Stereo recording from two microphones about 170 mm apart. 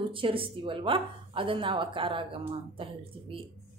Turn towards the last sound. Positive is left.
turn(degrees=-30)  # may be behind; listen again after turning